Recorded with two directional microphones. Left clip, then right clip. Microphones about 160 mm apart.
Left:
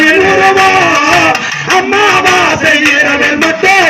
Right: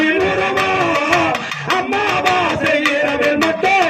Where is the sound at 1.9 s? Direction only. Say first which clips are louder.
Left 9 dB; 30° left (ahead or behind).